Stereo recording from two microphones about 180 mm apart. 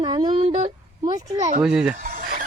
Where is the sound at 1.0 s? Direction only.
20° right (ahead or behind).